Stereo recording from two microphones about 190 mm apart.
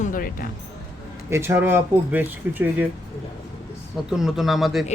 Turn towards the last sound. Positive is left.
turn(degrees=0)  # may be behind; listen again after turning